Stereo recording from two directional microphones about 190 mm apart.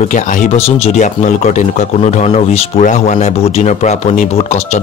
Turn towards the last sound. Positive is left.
turn(degrees=35)  # may be behind; listen again after turning